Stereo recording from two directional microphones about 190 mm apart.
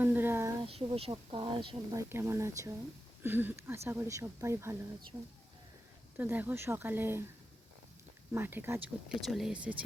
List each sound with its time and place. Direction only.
0.0 s a sound: 10° right (ahead or behind)
0.6 s speech: 30° right (ahead or behind)
2.0 s speech: 15° right (ahead or behind)
6.1 s speech: 10° right (ahead or behind)
8.3 s speech: 10° right (ahead or behind)